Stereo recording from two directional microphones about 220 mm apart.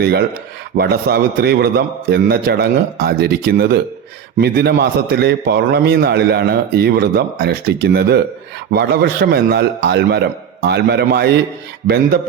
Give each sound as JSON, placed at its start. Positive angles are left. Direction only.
{"t": 0.0, "sound": "a man's voice", "side_deg": -50}